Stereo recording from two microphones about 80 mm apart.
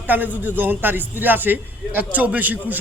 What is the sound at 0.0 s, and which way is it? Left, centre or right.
A man's voice, right.